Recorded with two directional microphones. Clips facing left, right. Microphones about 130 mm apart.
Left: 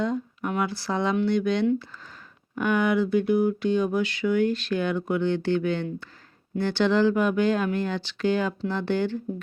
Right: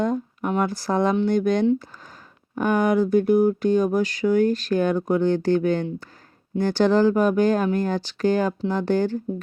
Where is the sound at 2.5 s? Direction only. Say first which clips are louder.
Right 3 dB; 40° right (ahead or behind).